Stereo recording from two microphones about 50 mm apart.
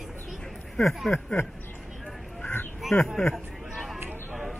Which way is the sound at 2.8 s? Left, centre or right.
Centre.